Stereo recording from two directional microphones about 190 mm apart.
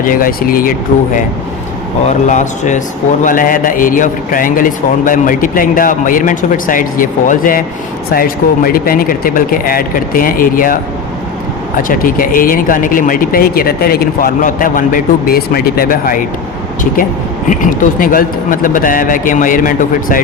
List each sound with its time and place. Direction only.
0.0 s speech: 45° left (ahead or behind)
2.0 s speech: 40° left (ahead or behind)
11.8 s speech: 45° left (ahead or behind)
17.5 s speech: 45° left (ahead or behind)